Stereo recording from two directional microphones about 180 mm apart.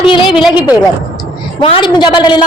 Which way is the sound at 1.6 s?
30° left (ahead or behind).